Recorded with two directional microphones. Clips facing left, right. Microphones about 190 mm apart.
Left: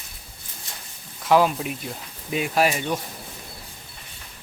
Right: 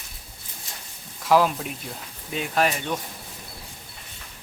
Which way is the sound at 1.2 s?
Centre (ahead or behind).